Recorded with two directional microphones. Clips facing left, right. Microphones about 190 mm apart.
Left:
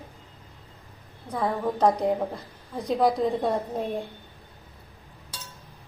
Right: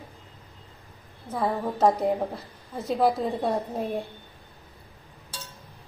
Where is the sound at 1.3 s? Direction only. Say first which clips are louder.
Left 1 dB; 5° right (ahead or behind).